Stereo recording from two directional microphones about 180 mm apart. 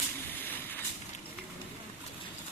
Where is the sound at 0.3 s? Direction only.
10° left (ahead or behind).